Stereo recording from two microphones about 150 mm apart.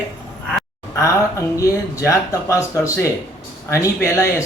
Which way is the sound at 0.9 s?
20° left (ahead or behind).